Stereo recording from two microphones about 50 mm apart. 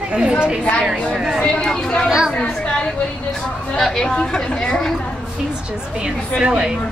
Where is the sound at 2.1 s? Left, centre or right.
Centre.